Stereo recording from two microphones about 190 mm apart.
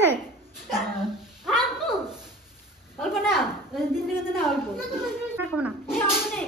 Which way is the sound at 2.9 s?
Centre (ahead or behind).